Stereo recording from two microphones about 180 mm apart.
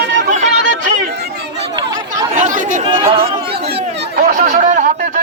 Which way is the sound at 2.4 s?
45° right (ahead or behind).